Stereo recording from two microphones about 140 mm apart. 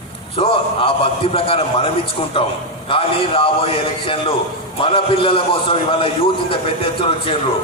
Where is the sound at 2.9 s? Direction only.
40° left (ahead or behind).